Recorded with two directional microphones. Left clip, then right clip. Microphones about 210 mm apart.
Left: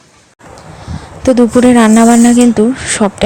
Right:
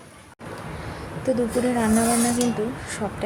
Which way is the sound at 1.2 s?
40° left (ahead or behind).